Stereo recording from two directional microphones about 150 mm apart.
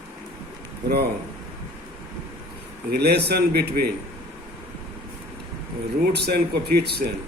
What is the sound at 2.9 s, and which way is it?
Speech, 90° right.